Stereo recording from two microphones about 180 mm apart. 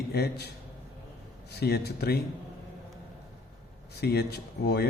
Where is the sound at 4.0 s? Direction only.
65° left (ahead or behind).